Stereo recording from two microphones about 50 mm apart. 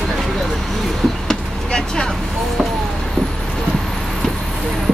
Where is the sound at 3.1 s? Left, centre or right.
Centre.